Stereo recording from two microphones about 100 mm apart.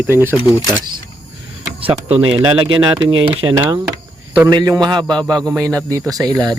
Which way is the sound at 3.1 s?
55° right (ahead or behind).